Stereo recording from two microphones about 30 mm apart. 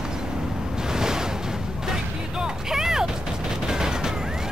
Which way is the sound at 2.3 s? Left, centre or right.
Centre.